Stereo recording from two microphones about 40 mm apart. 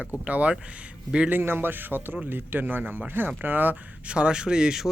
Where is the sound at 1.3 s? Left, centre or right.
Right.